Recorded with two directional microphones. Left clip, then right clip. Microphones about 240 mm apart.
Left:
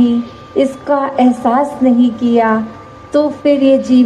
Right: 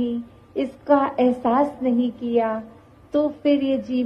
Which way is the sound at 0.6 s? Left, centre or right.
Right.